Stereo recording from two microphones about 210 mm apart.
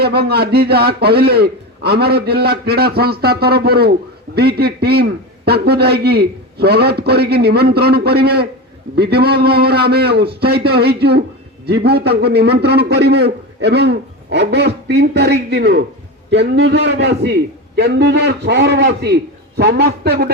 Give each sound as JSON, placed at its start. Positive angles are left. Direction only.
{"t": 0.0, "sound": "a man's voice", "side_deg": -50}